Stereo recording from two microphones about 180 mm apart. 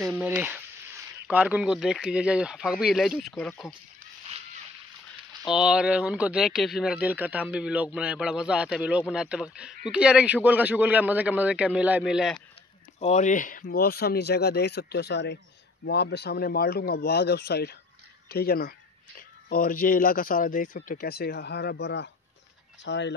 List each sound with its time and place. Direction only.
0.0 s speech: 5° right (ahead or behind)
5.5 s a man's voice: 5° right (ahead or behind)
13.0 s speech: 40° left (ahead or behind); by 23.1 s 80° left